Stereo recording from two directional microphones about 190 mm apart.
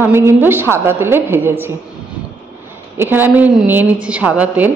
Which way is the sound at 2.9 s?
10° right (ahead or behind).